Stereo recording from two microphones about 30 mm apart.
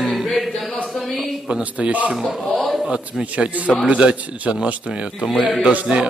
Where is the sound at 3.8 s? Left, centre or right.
Right.